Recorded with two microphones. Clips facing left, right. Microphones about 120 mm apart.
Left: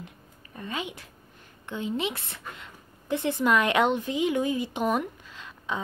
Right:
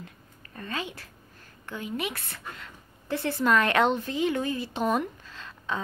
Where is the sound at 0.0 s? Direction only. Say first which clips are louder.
Left 1 dB; 15° left (ahead or behind).